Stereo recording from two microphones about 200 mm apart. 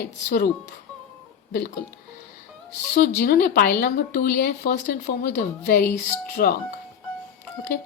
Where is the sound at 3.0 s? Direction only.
50° left (ahead or behind).